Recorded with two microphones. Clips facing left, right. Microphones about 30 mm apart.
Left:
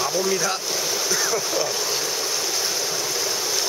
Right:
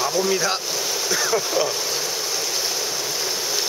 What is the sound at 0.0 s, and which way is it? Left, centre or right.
Speech, centre.